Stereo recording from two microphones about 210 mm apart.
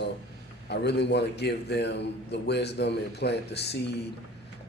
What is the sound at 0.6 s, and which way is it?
A man's voice, 55° left (ahead or behind).